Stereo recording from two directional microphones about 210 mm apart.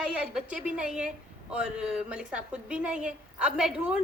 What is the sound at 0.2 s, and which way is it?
A woman's voice, 5° right (ahead or behind).